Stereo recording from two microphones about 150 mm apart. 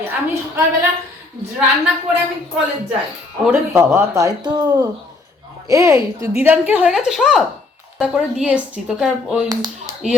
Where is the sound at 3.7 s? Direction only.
20° right (ahead or behind).